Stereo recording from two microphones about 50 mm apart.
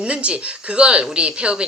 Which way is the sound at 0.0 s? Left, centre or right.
Right.